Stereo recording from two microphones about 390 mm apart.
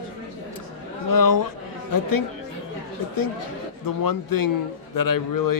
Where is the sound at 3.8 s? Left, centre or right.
Left.